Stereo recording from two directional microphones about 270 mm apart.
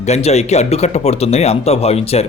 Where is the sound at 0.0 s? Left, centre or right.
Left.